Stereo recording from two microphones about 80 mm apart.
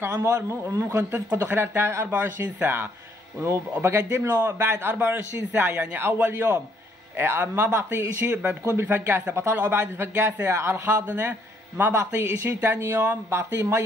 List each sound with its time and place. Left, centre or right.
0.0 s speech: right